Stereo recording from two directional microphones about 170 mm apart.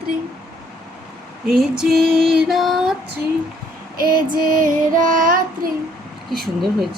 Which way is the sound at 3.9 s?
60° right (ahead or behind).